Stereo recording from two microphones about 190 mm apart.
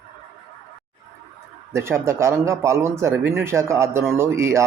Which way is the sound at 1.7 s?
15° right (ahead or behind).